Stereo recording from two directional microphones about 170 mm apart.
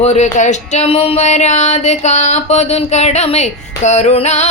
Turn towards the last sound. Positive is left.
turn(degrees=40)  # may be behind; listen again after turning